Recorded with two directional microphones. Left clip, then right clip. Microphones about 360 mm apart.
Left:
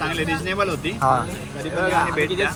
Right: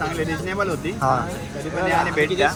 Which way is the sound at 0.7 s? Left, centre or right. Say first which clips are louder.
Left 1 dB; centre.